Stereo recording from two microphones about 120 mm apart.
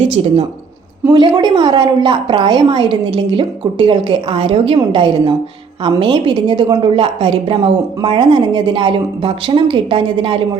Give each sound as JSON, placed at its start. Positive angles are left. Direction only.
{"t": 0.0, "sound": "speech", "side_deg": -50}
{"t": 1.1, "sound": "a woman's voice", "side_deg": -40}